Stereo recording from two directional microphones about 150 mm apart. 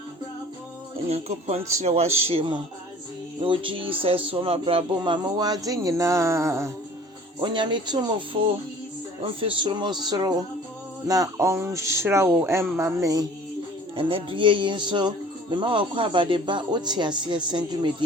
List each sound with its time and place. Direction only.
1.1 s speech: 45° right (ahead or behind); by 6.7 s 20° right (ahead or behind)
7.3 s speech: 30° right (ahead or behind)
13.9 s speech: 35° right (ahead or behind)